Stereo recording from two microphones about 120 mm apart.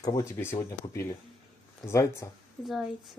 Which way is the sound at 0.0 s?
25° left (ahead or behind).